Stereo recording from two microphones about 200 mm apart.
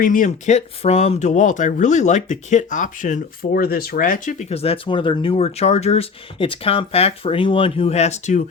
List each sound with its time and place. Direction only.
0.0 s speech: 40° left (ahead or behind)